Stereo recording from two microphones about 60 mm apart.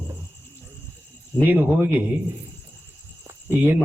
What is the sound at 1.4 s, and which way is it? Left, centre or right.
Speech, right.